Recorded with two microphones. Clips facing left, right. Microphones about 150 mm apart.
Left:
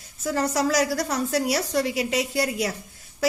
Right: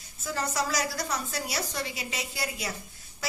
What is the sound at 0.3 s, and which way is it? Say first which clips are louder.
A woman's voice: left 7 dB; 70° left (ahead or behind).